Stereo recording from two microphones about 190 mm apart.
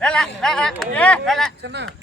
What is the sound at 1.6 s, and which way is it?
Speech, 65° right (ahead or behind).